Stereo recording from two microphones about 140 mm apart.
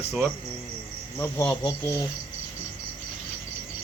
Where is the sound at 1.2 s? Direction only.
15° left (ahead or behind).